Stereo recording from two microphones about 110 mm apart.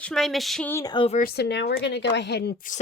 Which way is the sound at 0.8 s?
40° left (ahead or behind).